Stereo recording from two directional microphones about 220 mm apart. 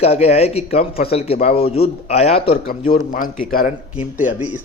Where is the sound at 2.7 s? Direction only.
40° left (ahead or behind).